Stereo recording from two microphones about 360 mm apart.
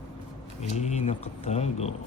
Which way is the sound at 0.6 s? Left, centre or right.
Centre.